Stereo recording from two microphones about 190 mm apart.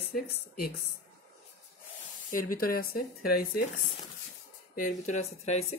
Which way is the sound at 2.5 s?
50° left (ahead or behind).